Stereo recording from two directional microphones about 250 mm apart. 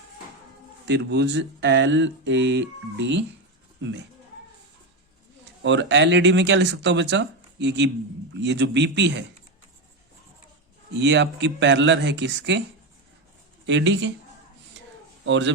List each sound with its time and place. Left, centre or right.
0.9 s speech: right
5.6 s speech: right
10.9 s speech: right
13.7 s speech: right
15.2 s a man's voice: right